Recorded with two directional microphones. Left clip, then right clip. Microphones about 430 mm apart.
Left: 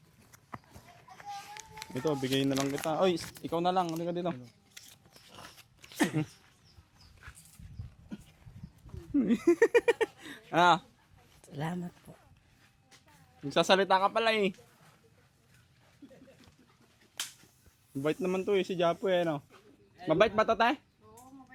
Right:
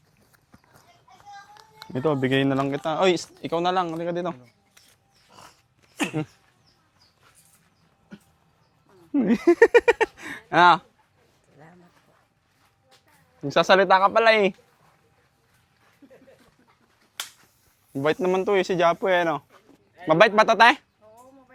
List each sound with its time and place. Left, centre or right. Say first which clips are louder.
1.9 s speech: right 9 dB; centre
6.0 s a sound: right 3 dB; centre
9.1 s speech: right 8 dB; right
13.5 s speech: right 8 dB; centre
18.0 s speech: right 9 dB; right